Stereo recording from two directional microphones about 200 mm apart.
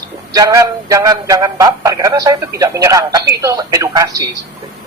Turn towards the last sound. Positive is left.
turn(degrees=-15)  # may be behind; listen again after turning